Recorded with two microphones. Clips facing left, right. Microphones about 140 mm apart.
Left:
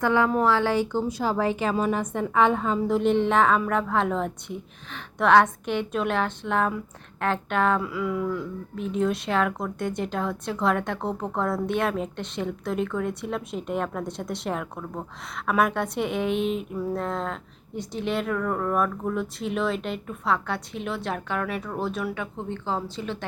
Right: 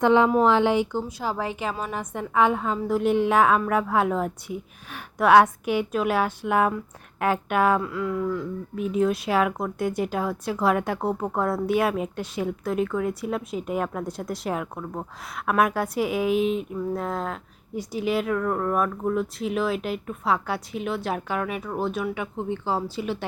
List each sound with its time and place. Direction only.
0.0 s a woman's voice: 20° right (ahead or behind)
7.8 s a woman's voice: 5° left (ahead or behind)